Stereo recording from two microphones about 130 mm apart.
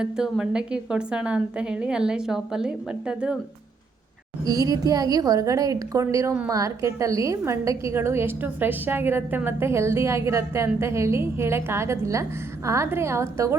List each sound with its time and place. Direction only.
0.0 s a woman's voice: 5° right (ahead or behind)
4.4 s a woman's voice: 30° right (ahead or behind)